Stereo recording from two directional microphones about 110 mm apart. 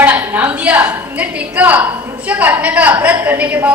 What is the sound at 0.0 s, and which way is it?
A woman's voice, 15° right (ahead or behind).